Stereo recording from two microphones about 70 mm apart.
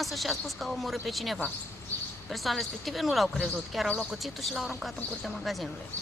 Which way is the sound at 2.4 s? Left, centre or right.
Centre.